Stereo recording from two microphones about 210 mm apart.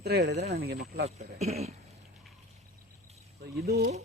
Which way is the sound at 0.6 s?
50° right (ahead or behind).